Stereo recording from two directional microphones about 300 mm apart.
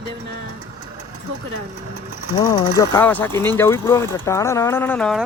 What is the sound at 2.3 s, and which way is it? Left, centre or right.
Speech, centre.